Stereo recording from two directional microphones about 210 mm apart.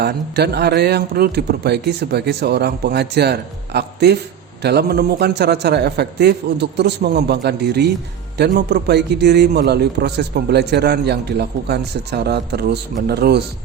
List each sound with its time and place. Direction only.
0.0 s a man's voice: 50° right (ahead or behind)